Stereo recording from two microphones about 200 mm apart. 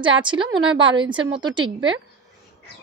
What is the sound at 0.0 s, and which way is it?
A woman's voice, 25° right (ahead or behind).